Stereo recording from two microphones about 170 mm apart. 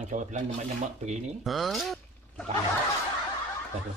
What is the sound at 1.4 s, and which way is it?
Speech, centre (ahead or behind).